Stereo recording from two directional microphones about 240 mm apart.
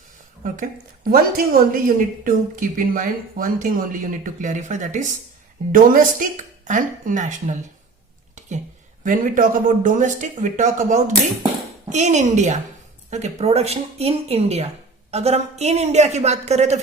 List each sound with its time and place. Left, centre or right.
0.4 s a woman's voice: right
8.4 s a sound: right
9.0 s a woman's voice: right